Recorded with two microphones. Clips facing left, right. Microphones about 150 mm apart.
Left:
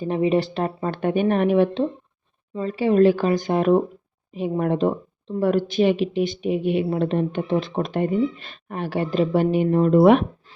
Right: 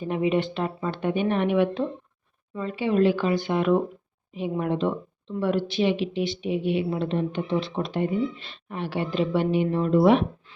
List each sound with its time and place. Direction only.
0.0 s speech: 35° left (ahead or behind); by 10.2 s 50° left (ahead or behind)